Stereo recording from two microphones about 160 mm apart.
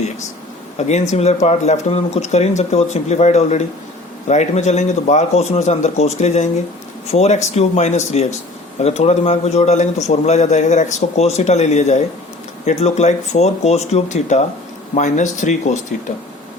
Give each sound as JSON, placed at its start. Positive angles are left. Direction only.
{"t": 0.8, "sound": "a man's voice", "side_deg": 45}